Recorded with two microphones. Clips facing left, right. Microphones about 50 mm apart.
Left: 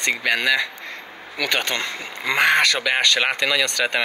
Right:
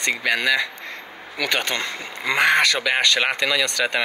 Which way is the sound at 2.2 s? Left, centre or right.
Centre.